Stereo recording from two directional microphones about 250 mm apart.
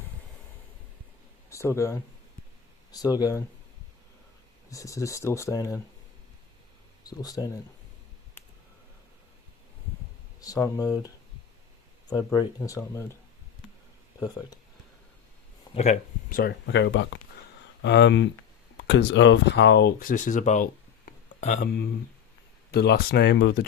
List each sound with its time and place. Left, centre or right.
1.5 s speech: centre
4.7 s speech: centre
7.2 s speech: centre
8.4 s a sound: centre
10.4 s speech: centre
15.7 s speech: left
22.7 s speech: left